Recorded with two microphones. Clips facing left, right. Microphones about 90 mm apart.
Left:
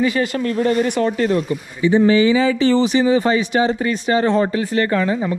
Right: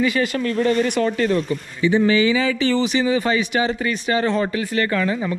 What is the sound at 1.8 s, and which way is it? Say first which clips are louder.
Speech: left 3 dB; 50° left (ahead or behind).